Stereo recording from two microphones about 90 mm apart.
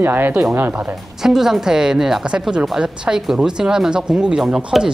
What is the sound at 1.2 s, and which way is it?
A woman's voice, 5° right (ahead or behind).